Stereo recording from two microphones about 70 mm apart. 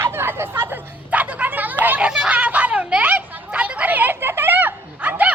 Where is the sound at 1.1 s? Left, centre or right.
Right.